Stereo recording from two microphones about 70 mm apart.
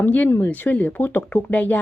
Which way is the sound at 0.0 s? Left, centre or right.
Left.